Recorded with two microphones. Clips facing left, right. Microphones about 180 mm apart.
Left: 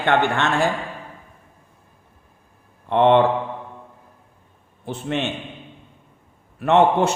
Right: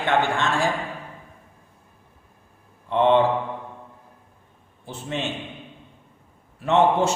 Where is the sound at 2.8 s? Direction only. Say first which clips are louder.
Left 3 dB; 60° left (ahead or behind).